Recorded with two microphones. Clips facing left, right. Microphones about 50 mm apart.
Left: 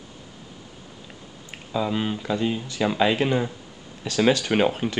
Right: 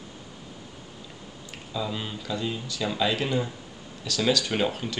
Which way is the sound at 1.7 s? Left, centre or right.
Left.